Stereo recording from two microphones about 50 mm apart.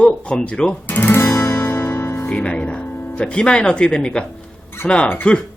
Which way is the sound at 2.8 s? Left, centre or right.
Left.